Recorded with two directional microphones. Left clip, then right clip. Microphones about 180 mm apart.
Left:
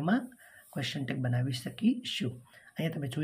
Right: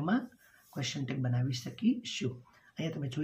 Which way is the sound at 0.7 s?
45° left (ahead or behind).